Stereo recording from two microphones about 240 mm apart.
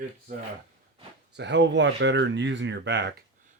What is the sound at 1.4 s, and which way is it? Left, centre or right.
Speech, right.